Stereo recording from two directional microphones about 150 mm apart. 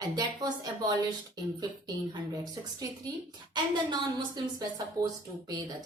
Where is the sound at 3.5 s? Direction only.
30° right (ahead or behind).